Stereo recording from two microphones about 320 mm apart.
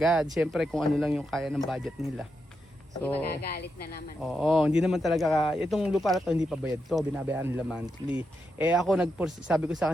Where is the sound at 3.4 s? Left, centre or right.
Left.